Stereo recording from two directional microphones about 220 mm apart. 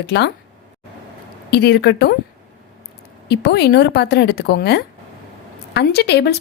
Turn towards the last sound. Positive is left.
turn(degrees=50)  # may be behind; listen again after turning